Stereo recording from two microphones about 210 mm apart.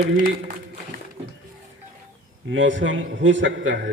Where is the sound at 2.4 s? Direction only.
60° right (ahead or behind).